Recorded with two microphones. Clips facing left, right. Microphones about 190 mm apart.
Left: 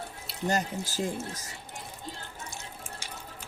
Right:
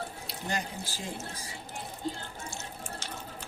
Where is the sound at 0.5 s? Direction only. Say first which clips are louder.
Left 5 dB; 45° left (ahead or behind).